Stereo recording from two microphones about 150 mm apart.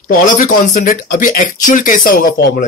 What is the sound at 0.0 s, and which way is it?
Speech, 65° left (ahead or behind).